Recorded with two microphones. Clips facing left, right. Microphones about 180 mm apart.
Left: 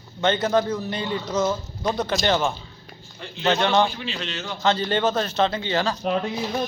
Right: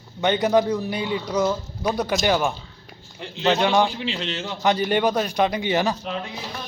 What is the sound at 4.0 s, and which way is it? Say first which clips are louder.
Speech: right 3 dB; 25° right (ahead or behind).